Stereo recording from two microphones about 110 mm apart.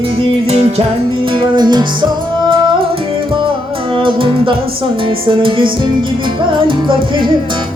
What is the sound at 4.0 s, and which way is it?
Music, 55° right (ahead or behind).